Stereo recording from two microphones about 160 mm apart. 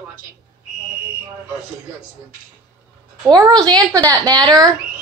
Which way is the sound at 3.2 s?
25° right (ahead or behind).